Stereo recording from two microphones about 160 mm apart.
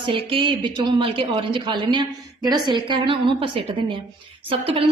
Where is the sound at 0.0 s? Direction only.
30° right (ahead or behind).